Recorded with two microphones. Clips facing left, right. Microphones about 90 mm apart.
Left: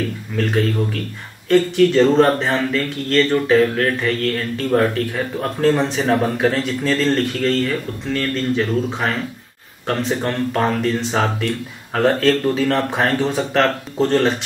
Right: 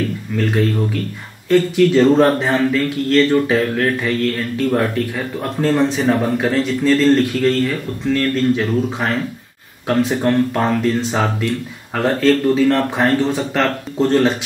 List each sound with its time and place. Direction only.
0.4 s speech: centre (ahead or behind)